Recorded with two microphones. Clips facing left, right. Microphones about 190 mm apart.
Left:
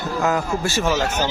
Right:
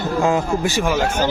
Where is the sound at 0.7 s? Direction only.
10° right (ahead or behind).